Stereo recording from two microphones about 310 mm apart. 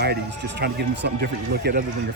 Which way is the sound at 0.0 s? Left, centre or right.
Right.